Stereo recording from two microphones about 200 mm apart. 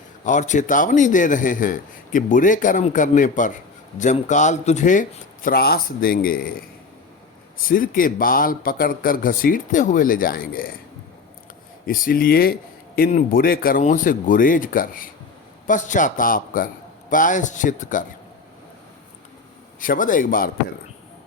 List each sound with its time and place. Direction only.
0.3 s a man's voice: 40° left (ahead or behind)
7.7 s speech: 45° left (ahead or behind)
11.9 s a man's voice: 45° left (ahead or behind)
19.8 s speech: 40° left (ahead or behind)